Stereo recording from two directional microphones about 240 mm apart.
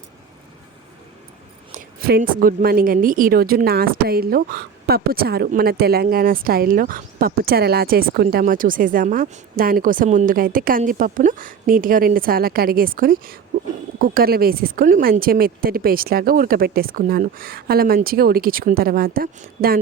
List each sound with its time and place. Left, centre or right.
1.7 s speech: right